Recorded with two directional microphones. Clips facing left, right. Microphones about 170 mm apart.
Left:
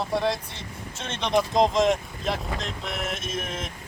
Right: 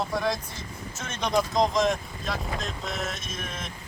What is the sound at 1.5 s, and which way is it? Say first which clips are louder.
Speech: left 5 dB; 25° left (ahead or behind).